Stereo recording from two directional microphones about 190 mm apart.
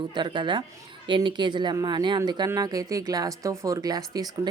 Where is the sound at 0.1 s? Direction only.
25° right (ahead or behind).